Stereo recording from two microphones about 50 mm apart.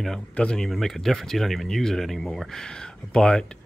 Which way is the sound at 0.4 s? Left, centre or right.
Centre.